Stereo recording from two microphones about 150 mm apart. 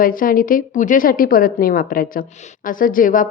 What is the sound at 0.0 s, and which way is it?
A woman's voice, 70° left (ahead or behind).